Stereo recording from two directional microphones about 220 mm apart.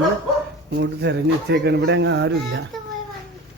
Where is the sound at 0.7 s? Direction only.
50° right (ahead or behind).